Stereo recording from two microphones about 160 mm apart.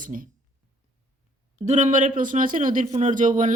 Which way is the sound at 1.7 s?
50° right (ahead or behind).